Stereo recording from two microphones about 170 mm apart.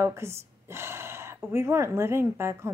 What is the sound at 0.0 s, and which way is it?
Speech, 15° right (ahead or behind).